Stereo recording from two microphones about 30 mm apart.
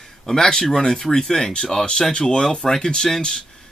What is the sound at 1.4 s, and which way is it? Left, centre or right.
Speech, left.